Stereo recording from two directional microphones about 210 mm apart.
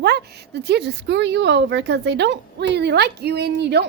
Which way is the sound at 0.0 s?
50° right (ahead or behind).